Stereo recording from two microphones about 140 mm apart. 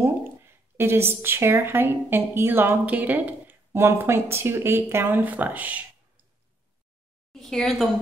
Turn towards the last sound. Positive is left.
turn(degrees=0)  # may be behind; listen again after turning